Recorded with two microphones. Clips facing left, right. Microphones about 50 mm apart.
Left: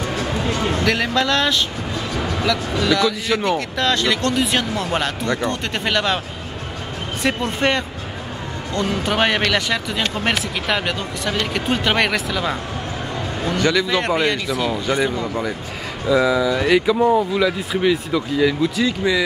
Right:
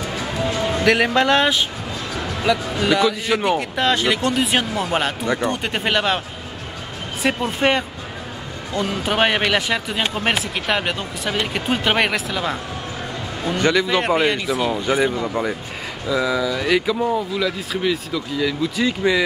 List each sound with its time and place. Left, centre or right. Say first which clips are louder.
0.4 s a sound: right 2 dB; centre
2.4 s a man's voice: right 2 dB; right
7.2 s a man's voice: right 1 dB; centre
13.6 s a man's voice: right 1 dB; centre
16.1 s speech: left 4 dB; centre
18.8 s a man's voice: even; centre